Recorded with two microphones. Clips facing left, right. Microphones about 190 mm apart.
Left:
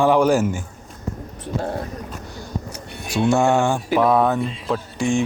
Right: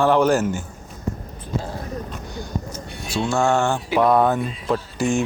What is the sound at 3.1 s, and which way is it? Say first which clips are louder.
Speech: left 3 dB; 15° left (ahead or behind).